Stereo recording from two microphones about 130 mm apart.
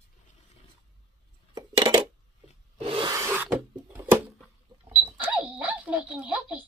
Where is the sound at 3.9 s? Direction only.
15° right (ahead or behind).